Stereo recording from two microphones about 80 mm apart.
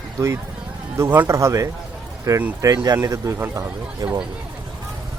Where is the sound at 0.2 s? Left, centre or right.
Right.